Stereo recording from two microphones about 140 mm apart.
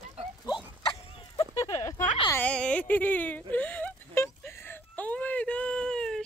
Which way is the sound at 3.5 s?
10° left (ahead or behind).